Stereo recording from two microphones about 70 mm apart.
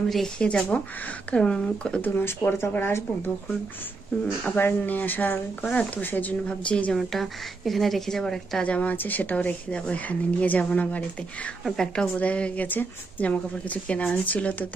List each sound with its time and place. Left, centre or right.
0.1 s speech: centre
2.0 s a woman's voice: left
4.6 s a woman's voice: left
6.4 s speech: centre
7.0 s a woman's voice: centre
8.6 s a woman's voice: left
11.6 s a woman's voice: centre